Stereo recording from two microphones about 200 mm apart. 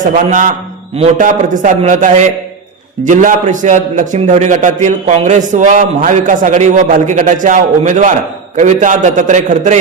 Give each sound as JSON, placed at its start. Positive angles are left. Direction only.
{"t": 0.0, "sound": "a man's voice", "side_deg": -40}